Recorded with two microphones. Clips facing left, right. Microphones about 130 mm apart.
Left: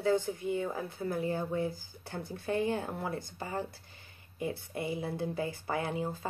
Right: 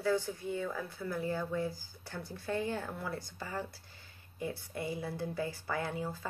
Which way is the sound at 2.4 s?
20° left (ahead or behind).